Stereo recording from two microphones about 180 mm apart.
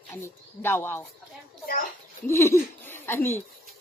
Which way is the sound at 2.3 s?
15° left (ahead or behind).